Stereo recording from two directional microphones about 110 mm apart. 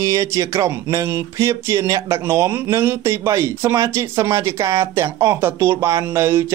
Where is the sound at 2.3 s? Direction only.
20° right (ahead or behind).